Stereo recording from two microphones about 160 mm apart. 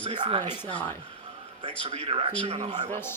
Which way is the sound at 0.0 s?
30° right (ahead or behind).